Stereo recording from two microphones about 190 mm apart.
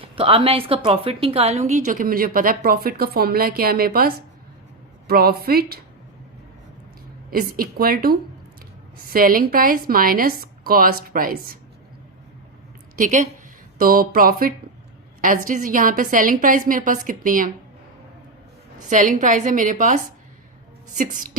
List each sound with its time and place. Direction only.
0.0 s a woman's voice: 30° right (ahead or behind); by 5.8 s 55° right (ahead or behind)
7.3 s a woman's voice: 50° right (ahead or behind)
13.0 s a woman's voice: 40° right (ahead or behind)
18.9 s a woman's voice: 40° right (ahead or behind)
21.0 s a woman's voice: 45° right (ahead or behind)